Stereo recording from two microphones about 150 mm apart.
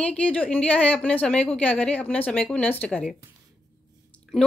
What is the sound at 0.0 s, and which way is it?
Speech, 10° left (ahead or behind).